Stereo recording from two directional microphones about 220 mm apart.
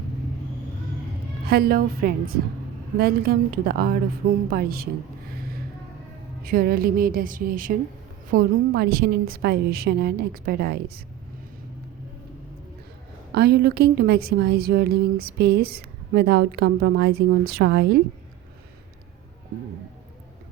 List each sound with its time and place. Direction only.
1.5 s a woman's voice: 45° right (ahead or behind)
6.4 s a woman's voice: 40° right (ahead or behind)
13.3 s a woman's voice: 45° right (ahead or behind)